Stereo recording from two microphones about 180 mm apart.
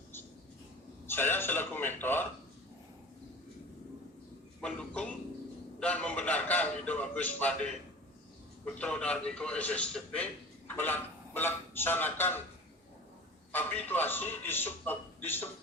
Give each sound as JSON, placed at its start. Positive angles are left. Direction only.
{"t": 1.0, "sound": "a man's voice", "side_deg": 10}
{"t": 4.6, "sound": "a man's voice", "side_deg": 5}
{"t": 13.5, "sound": "a man's voice", "side_deg": 10}